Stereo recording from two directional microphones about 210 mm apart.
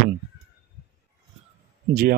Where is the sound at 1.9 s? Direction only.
45° right (ahead or behind).